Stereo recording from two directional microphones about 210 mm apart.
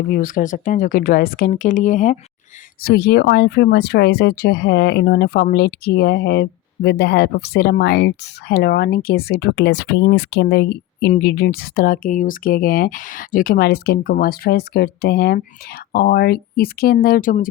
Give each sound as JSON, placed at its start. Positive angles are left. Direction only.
{"t": 0.1, "sound": "speech", "side_deg": 40}
{"t": 2.8, "sound": "speech", "side_deg": 50}